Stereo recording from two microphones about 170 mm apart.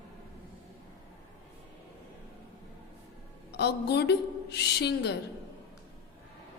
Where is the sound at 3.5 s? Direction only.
75° left (ahead or behind).